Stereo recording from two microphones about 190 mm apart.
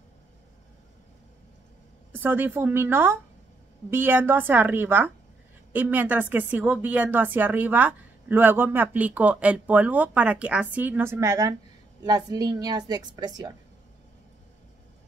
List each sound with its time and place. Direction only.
2.1 s a woman's voice: 10° right (ahead or behind)